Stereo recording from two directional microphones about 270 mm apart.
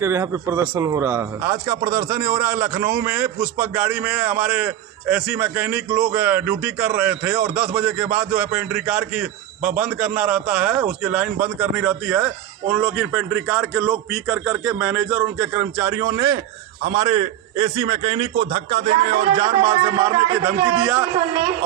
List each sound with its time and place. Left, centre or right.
0.0 s a man's voice: centre